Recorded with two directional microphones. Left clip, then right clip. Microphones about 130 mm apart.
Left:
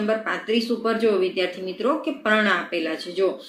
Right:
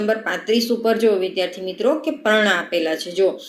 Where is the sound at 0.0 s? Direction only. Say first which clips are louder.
Right 3 dB; 25° right (ahead or behind).